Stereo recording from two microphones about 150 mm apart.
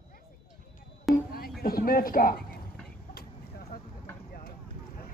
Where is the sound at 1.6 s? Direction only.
80° left.